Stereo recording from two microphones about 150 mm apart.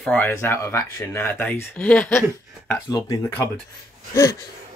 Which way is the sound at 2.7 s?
20° left (ahead or behind).